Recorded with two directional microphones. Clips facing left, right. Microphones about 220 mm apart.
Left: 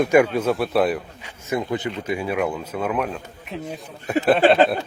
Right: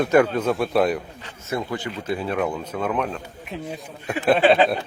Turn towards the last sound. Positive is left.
turn(degrees=0)  # may be behind; listen again after turning